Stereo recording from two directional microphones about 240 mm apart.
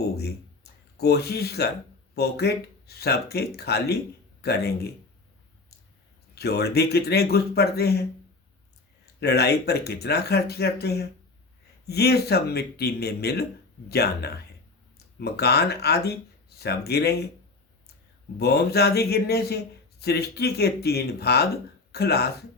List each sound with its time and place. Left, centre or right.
0.0 s a sound: left
2.1 s speech: left
6.3 s speech: left
9.2 s speech: left
18.3 s speech: left